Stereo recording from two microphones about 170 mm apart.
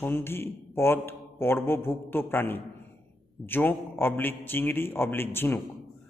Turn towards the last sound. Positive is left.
turn(degrees=15)  # may be behind; listen again after turning